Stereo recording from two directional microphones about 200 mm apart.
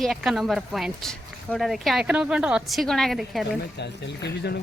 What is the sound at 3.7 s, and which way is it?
Speech, 55° left (ahead or behind).